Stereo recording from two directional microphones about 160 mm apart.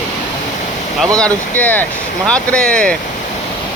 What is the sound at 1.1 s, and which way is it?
Speech, 10° left (ahead or behind).